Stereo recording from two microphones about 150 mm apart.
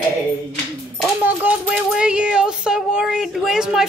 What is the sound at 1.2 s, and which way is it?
Speech, 10° right (ahead or behind).